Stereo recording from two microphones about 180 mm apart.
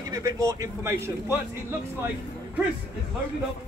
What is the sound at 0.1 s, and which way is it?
A man's voice, 20° right (ahead or behind).